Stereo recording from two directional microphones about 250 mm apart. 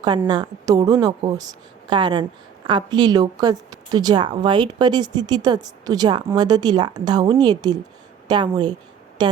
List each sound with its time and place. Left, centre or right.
0.0 s a woman's voice: centre